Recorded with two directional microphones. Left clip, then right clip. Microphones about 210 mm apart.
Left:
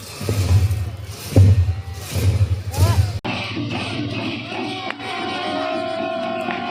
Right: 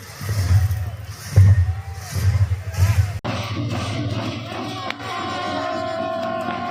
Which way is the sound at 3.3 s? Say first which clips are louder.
Left 2 dB; 30° right (ahead or behind).